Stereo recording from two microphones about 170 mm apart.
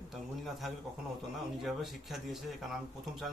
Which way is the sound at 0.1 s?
Centre (ahead or behind).